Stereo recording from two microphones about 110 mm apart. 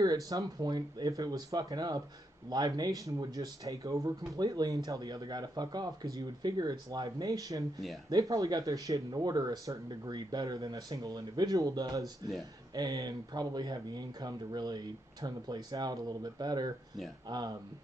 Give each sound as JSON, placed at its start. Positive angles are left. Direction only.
{"t": 0.0, "sound": "speech", "side_deg": -35}
{"t": 12.0, "sound": "speech", "side_deg": 0}
{"t": 12.7, "sound": "speech", "side_deg": -35}